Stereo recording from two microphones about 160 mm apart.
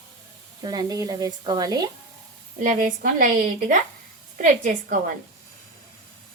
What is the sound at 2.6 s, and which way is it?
A woman's voice, 55° right (ahead or behind).